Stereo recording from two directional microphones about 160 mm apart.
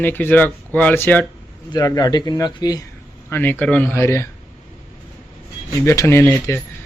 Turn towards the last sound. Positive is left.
turn(degrees=15)  # may be behind; listen again after turning